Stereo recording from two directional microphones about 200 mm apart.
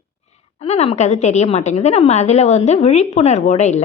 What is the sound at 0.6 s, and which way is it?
A woman's voice, 30° left (ahead or behind).